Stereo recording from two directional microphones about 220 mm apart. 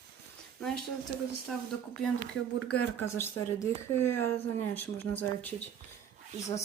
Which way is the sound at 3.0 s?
10° left (ahead or behind).